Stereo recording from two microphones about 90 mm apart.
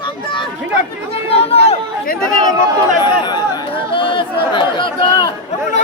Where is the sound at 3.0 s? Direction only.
55° left (ahead or behind).